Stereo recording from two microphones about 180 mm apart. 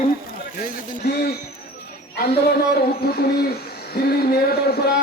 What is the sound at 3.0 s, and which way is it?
A man's voice, 60° left (ahead or behind).